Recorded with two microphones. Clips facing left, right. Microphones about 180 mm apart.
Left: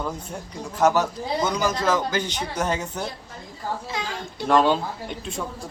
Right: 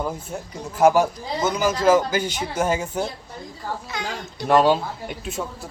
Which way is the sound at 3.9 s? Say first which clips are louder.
Right 2 dB; 25° left (ahead or behind).